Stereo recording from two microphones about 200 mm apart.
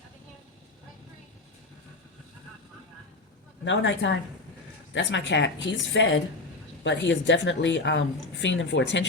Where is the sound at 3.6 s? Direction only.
65° left (ahead or behind).